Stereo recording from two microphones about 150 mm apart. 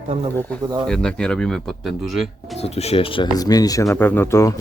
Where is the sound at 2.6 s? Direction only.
45° left (ahead or behind).